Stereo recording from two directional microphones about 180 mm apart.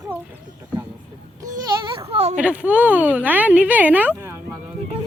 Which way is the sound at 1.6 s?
25° right (ahead or behind).